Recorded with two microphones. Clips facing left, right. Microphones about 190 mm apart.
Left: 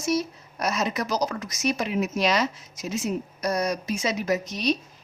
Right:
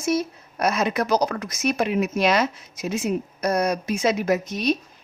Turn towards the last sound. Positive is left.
turn(degrees=-50)  # may be behind; listen again after turning